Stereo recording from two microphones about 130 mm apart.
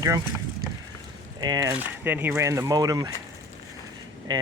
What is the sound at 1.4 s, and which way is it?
Speech, 30° right (ahead or behind).